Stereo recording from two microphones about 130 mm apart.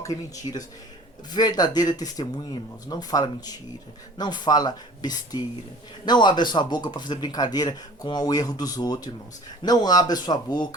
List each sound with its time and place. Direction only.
0.0 s a man's voice: 25° left (ahead or behind)